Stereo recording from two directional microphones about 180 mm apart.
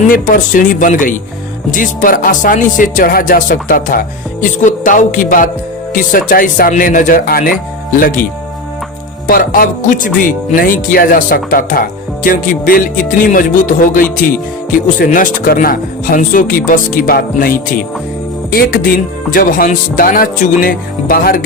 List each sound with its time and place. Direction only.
0.1 s speech: 50° left (ahead or behind)
9.2 s speech: 55° left (ahead or behind)